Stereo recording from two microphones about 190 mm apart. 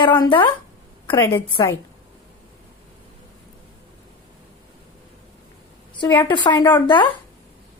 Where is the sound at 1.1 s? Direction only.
15° left (ahead or behind).